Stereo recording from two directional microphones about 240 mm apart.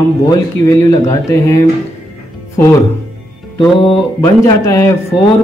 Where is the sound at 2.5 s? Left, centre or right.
Centre.